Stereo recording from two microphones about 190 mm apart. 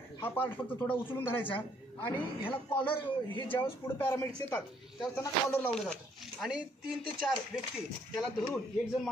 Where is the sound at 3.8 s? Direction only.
10° left (ahead or behind).